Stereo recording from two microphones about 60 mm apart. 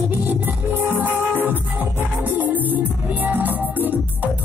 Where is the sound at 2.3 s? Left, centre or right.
Right.